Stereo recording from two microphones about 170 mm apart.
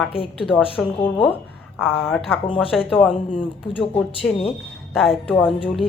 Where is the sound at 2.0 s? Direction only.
Centre (ahead or behind).